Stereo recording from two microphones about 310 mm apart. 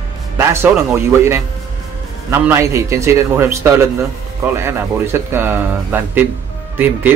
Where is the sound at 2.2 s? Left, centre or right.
Centre.